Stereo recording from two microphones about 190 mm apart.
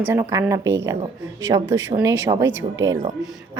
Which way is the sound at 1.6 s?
85° right.